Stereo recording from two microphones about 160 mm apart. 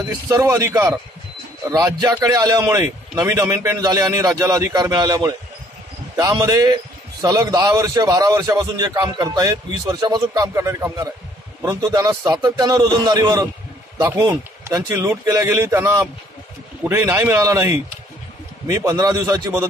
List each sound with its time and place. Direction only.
0.3 s a man's voice: 20° right (ahead or behind)